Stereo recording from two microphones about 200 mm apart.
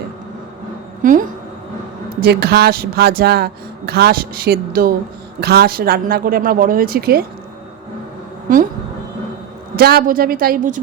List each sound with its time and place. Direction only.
1.0 s a woman's voice: 40° right (ahead or behind)
2.2 s speech: 55° right (ahead or behind)
8.5 s speech: 45° right (ahead or behind)
9.7 s speech: 50° right (ahead or behind)